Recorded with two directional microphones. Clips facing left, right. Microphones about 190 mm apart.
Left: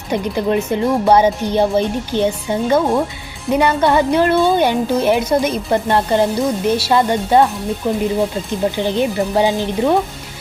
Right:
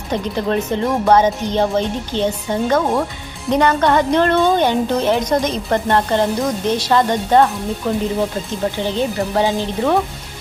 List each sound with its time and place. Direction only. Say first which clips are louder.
0.1 s speech: left 2 dB; 15° left (ahead or behind)
8.9 s speech: left 2 dB; 15° left (ahead or behind)